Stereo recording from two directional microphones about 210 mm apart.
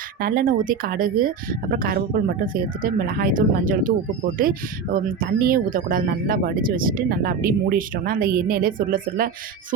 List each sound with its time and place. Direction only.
0.2 s speech: 45° right (ahead or behind)